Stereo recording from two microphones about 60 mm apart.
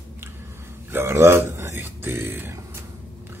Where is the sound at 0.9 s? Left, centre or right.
Right.